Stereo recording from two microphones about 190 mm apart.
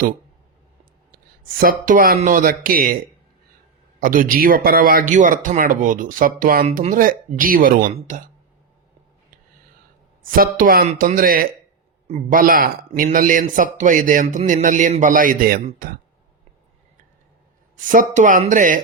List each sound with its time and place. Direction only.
1.1 s a sound: 50° right (ahead or behind)
1.8 s a man's voice: 45° right (ahead or behind)
4.0 s a man's voice: 45° right (ahead or behind)
10.2 s a man's voice: 50° right (ahead or behind)
17.7 s a man's voice: 45° right (ahead or behind)